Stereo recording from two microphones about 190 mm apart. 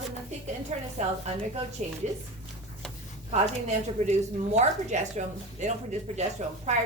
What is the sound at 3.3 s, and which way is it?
A woman's voice, 35° right (ahead or behind).